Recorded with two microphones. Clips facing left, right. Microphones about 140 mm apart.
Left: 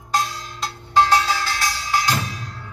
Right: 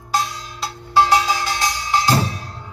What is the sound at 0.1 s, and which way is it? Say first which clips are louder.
Music: right 1 dB; centre (ahead or behind).